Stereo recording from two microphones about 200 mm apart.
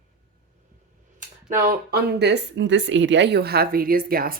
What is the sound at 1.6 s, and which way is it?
Speech, 45° right (ahead or behind).